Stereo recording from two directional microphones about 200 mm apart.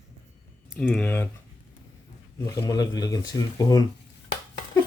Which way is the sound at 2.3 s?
15° left (ahead or behind).